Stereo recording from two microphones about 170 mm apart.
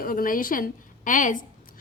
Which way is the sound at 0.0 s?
55° left (ahead or behind).